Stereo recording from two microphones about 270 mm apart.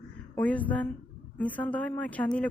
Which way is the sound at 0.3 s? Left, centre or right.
Centre.